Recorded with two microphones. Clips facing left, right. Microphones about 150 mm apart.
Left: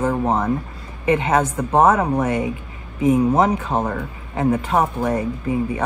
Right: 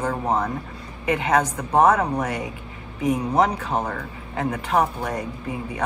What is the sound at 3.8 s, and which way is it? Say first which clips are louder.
Speech: left 4 dB; 30° left (ahead or behind).